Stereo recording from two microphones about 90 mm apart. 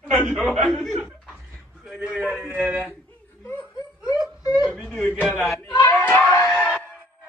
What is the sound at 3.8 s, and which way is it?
Laughter, 40° left (ahead or behind).